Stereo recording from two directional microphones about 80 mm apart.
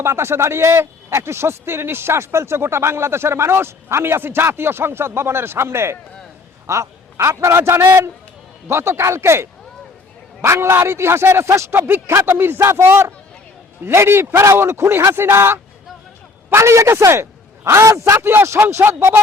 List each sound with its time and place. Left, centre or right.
0.0 s a man's voice: right
11.7 s a man's voice: right
18.2 s speech: right